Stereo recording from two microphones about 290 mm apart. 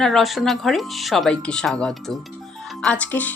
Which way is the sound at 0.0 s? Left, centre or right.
Centre.